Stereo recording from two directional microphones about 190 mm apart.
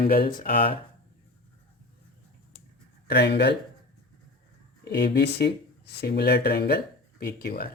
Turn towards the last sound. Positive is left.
turn(degrees=55)  # may be behind; listen again after turning